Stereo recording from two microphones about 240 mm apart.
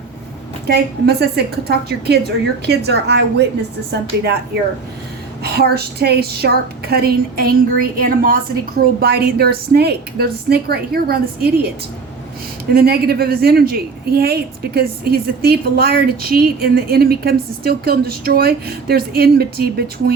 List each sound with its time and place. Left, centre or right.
0.7 s a woman's voice: right
5.4 s a woman's voice: right
12.7 s a woman's voice: right